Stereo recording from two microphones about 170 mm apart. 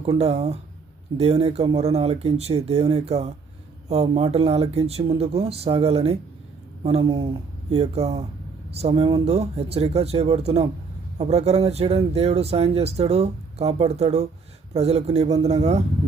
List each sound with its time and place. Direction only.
0.0 s speech: 35° right (ahead or behind)